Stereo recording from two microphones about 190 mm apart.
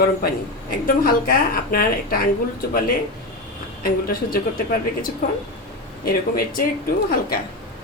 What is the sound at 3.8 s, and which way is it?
Speech, 50° left (ahead or behind).